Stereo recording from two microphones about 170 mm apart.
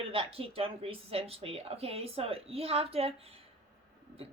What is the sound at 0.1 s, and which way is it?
Speech, 35° right (ahead or behind).